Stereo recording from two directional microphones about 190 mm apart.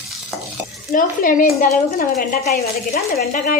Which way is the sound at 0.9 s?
45° left (ahead or behind).